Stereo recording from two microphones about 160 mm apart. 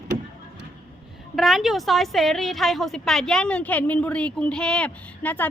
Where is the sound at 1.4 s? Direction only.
Centre (ahead or behind).